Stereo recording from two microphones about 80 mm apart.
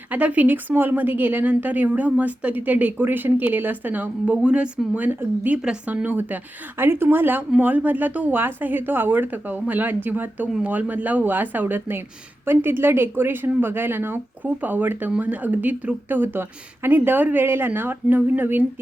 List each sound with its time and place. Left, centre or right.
0.1 s a woman's voice: centre